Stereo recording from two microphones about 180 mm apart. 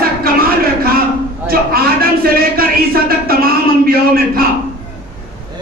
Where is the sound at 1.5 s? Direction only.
55° right (ahead or behind).